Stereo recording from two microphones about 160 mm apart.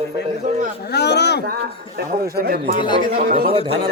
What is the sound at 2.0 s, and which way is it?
Speech, 75° right (ahead or behind).